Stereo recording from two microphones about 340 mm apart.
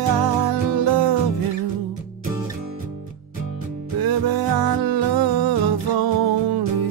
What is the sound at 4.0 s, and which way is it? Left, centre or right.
Music, right.